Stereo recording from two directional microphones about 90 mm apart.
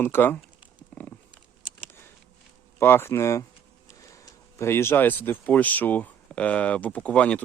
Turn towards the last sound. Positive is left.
turn(degrees=15)  # may be behind; listen again after turning